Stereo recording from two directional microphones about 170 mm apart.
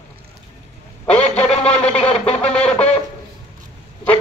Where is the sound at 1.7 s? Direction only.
35° left (ahead or behind).